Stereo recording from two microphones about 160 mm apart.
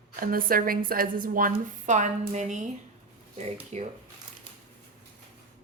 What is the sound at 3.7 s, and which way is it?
Speech, 45° right (ahead or behind).